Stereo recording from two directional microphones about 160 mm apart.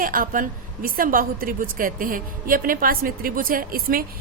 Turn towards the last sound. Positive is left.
turn(degrees=-65)  # may be behind; listen again after turning